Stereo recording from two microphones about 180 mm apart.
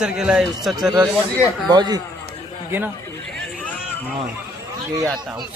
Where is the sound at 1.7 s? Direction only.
25° right (ahead or behind).